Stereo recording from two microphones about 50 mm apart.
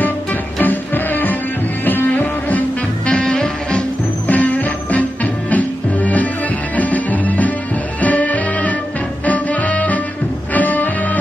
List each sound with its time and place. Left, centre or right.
0.0 s music: left
3.1 s music: centre
4.3 s music: left